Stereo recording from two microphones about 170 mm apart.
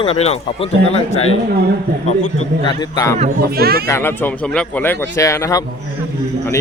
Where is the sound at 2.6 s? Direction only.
20° left (ahead or behind).